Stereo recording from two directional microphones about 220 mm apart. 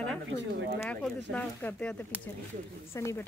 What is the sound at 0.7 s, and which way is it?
Speech, 10° left (ahead or behind).